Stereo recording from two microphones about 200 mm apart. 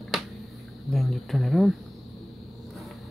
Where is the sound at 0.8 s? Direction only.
Centre (ahead or behind).